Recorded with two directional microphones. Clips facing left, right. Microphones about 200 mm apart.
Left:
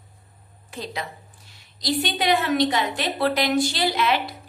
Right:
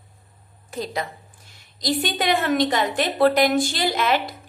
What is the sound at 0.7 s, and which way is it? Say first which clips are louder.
A woman's voice: right 4 dB; 45° right (ahead or behind).